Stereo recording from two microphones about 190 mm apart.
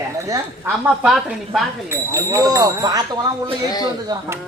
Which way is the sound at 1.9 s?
15° right (ahead or behind).